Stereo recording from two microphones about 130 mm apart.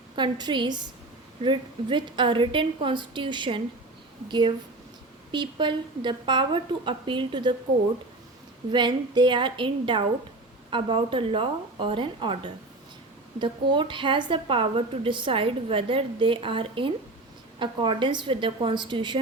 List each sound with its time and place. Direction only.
0.2 s a woman's voice: 35° right (ahead or behind)
8.7 s a woman's voice: 35° right (ahead or behind)